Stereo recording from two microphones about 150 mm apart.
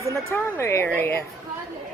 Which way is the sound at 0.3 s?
15° left (ahead or behind).